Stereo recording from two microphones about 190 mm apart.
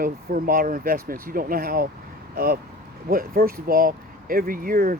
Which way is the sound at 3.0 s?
50° right (ahead or behind).